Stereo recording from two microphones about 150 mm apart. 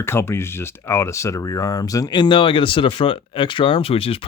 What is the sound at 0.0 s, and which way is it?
Speech, 15° left (ahead or behind).